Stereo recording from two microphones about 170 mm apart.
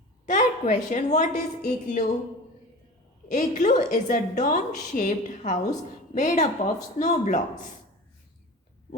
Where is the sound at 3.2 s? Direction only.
45° left (ahead or behind).